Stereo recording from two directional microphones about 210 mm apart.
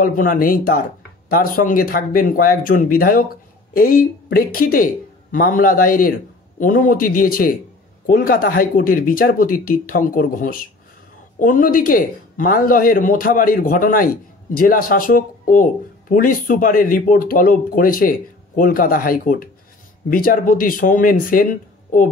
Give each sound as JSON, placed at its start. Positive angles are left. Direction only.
{"t": 0.0, "sound": "speech", "side_deg": 40}